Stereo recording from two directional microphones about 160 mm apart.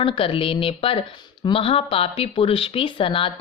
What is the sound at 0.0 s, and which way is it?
Speech, 35° left (ahead or behind).